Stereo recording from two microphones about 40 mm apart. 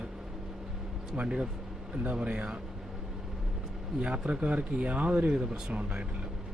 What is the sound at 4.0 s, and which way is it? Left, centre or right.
A man's voice, right.